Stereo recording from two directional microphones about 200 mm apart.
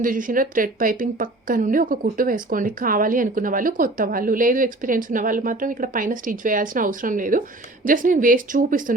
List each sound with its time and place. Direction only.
0.0 s a woman's voice: 40° right (ahead or behind)